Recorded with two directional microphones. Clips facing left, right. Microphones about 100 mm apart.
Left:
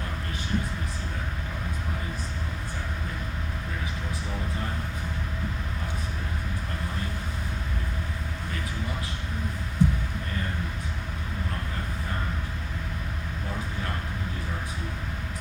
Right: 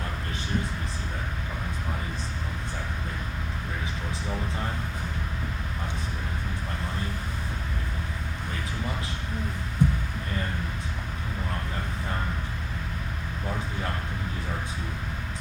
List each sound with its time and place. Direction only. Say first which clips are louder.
9.8 s heart sounds: left 1 dB; 50° right (ahead or behind)